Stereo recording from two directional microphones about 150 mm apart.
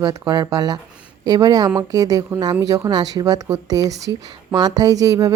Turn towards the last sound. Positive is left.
turn(degrees=-25)  # may be behind; listen again after turning